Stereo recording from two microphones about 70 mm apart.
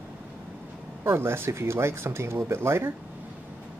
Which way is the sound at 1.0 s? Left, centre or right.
Right.